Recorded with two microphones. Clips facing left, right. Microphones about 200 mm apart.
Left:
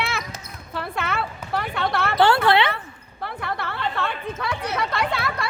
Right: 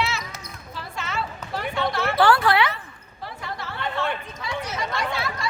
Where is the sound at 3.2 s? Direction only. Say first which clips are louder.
Left 5 dB; 60° left (ahead or behind).